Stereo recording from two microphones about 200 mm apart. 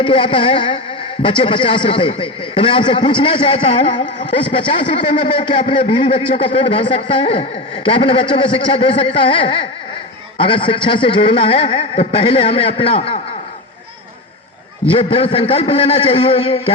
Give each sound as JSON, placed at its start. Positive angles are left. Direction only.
{"t": 0.0, "sound": "speech", "side_deg": 25}
{"t": 14.8, "sound": "speech", "side_deg": 25}